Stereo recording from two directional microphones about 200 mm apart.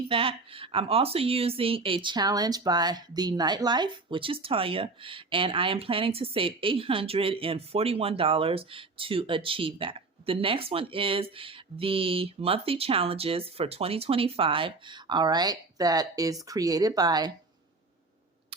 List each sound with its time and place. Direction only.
0.1 s speech: 25° right (ahead or behind)